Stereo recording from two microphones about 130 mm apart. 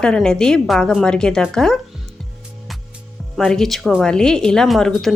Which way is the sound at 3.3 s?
5° left (ahead or behind).